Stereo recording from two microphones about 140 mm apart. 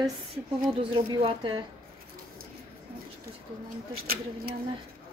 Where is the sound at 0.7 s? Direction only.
40° right (ahead or behind).